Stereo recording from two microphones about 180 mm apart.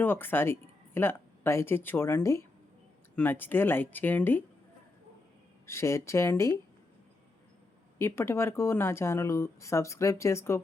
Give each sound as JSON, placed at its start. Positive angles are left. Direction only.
{"t": 0.0, "sound": "speech", "side_deg": 10}
{"t": 5.6, "sound": "speech", "side_deg": 15}
{"t": 7.9, "sound": "speech", "side_deg": 15}